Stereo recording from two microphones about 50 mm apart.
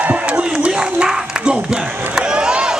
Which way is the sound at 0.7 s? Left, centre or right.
Centre.